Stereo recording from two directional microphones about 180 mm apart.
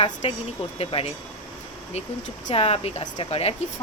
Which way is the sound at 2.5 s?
30° left (ahead or behind).